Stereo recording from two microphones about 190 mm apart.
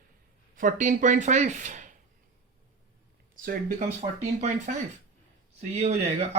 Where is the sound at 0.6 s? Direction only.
40° right (ahead or behind).